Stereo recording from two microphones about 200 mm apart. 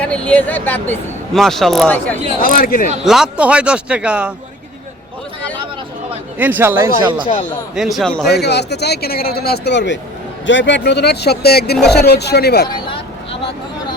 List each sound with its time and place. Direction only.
0.3 s speech: 10° left (ahead or behind)
2.4 s speech: 45° left (ahead or behind)
3.0 s speech: centre (ahead or behind)
6.4 s speech: 10° right (ahead or behind)
7.0 s speech: 25° right (ahead or behind)
7.8 s speech: centre (ahead or behind)
8.3 s speech: 55° left (ahead or behind)
12.6 s a sound: 25° left (ahead or behind)